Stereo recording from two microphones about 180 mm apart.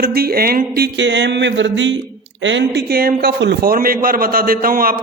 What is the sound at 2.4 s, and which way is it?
A man's voice, 90° right.